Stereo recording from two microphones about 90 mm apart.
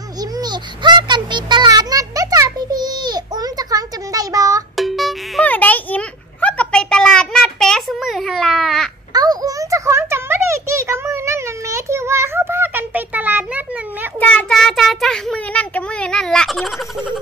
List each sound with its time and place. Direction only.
0.2 s child singing: 50° right (ahead or behind)
4.7 s music: centre (ahead or behind)
5.4 s a sound: 20° left (ahead or behind)
8.0 s babbling: centre (ahead or behind)
9.1 s a sound: 45° right (ahead or behind); by 13.7 s 20° right (ahead or behind)
14.2 s child singing: 10° left (ahead or behind)